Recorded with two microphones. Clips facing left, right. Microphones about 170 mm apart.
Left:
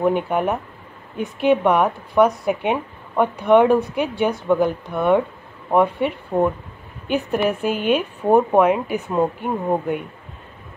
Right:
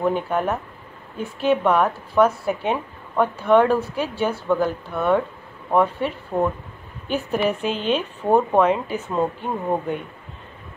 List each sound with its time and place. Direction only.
0.0 s a woman's voice: 10° left (ahead or behind)